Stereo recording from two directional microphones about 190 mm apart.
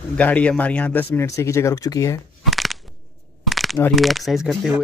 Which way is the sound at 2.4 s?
Centre (ahead or behind).